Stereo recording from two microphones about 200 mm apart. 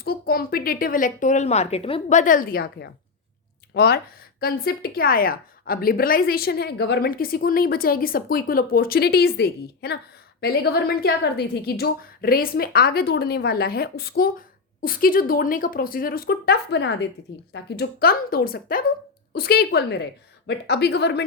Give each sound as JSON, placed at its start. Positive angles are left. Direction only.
{"t": 0.0, "sound": "a woman's voice", "side_deg": 50}